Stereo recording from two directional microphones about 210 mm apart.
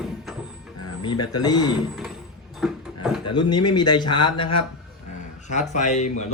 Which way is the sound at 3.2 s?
20° left (ahead or behind).